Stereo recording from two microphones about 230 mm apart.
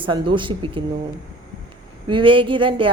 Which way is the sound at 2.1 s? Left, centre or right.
Right.